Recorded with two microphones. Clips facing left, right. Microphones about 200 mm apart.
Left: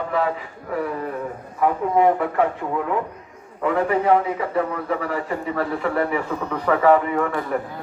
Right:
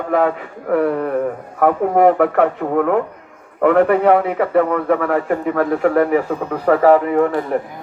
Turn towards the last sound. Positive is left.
turn(degrees=-35)  # may be behind; listen again after turning